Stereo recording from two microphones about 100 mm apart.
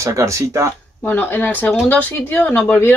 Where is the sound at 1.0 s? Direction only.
20° left (ahead or behind).